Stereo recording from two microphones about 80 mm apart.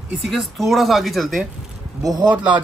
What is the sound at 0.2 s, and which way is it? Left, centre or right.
Speech, centre.